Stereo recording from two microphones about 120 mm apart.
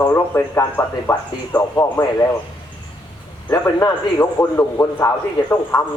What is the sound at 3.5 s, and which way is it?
A man's voice, 25° left (ahead or behind).